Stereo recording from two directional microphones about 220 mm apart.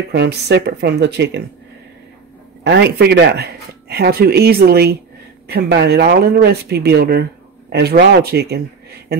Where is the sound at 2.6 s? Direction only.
50° right (ahead or behind).